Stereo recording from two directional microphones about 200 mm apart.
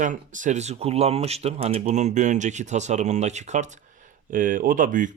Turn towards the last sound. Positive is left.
turn(degrees=-40)  # may be behind; listen again after turning